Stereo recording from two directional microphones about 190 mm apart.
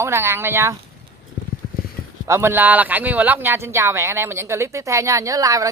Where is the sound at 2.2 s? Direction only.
15° right (ahead or behind).